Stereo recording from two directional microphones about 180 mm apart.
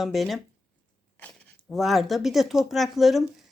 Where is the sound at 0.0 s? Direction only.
Centre (ahead or behind).